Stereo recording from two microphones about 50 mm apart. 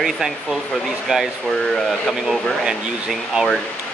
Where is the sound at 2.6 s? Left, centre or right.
Centre.